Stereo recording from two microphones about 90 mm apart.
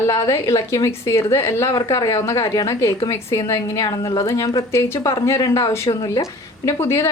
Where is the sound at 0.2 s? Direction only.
40° left (ahead or behind).